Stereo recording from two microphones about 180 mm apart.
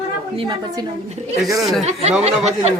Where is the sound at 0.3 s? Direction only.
25° right (ahead or behind).